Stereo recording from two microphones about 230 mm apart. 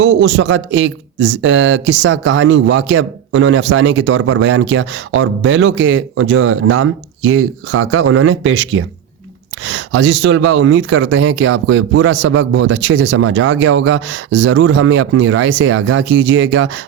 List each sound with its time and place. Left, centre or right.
0.0 s speech: right